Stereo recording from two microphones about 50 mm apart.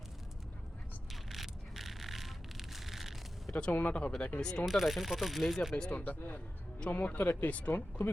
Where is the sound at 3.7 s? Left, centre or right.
Left.